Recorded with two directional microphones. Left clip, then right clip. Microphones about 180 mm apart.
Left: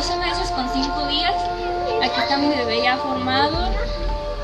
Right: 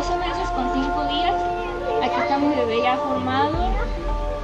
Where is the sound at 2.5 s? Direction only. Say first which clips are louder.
Left 1 dB; 20° left (ahead or behind).